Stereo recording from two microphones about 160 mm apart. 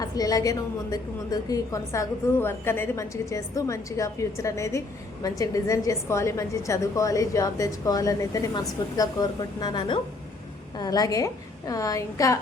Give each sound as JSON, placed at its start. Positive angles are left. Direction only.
{"t": 0.0, "sound": "a woman's voice", "side_deg": 20}